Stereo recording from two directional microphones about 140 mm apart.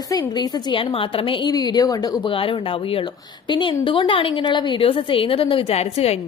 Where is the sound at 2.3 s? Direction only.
40° left (ahead or behind).